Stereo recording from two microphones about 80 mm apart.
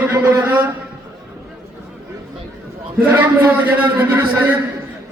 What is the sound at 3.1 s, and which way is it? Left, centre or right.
A man's voice, right.